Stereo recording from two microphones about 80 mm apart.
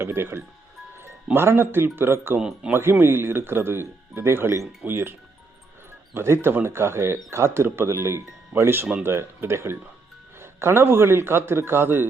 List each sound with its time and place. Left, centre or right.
0.0 s speech: right
2.4 s speech: centre
2.7 s speech: right
6.1 s a man's voice: right